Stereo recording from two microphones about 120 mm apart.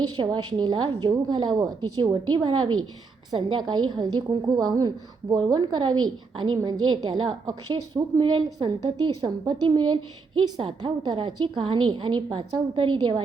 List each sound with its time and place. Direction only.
0.2 s a woman's voice: 35° right (ahead or behind)